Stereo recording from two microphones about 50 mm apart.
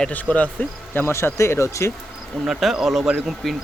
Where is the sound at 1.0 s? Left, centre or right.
Left.